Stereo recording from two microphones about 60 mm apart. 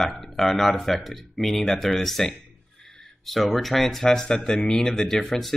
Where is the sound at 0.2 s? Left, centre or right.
Centre.